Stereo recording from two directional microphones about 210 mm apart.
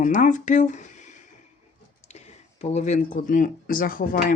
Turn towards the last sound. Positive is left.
turn(degrees=40)  # may be behind; listen again after turning